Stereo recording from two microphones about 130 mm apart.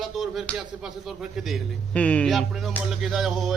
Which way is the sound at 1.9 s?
10° left (ahead or behind).